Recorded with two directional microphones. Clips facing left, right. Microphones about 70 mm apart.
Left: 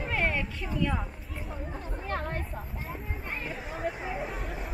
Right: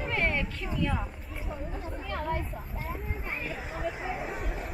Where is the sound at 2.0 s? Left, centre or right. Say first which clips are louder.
Right 1 dB; left.